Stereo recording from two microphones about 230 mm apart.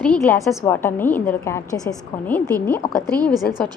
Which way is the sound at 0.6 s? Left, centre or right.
Centre.